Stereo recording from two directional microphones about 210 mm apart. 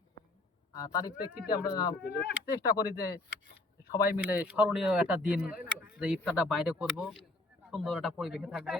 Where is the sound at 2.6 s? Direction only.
15° left (ahead or behind).